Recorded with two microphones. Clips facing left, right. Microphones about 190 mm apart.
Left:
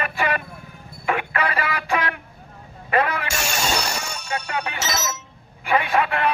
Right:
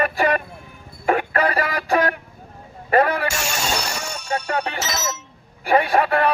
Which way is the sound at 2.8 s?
40° right (ahead or behind).